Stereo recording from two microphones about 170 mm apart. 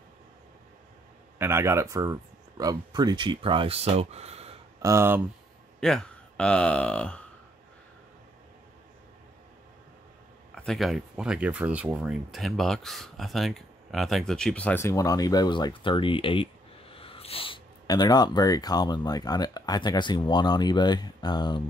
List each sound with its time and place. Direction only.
1.4 s speech: 15° right (ahead or behind); by 4.6 s 40° right (ahead or behind)
4.8 s speech: 15° right (ahead or behind)
5.8 s speech: 5° left (ahead or behind)
10.5 s speech: centre (ahead or behind); by 21.6 s 25° left (ahead or behind)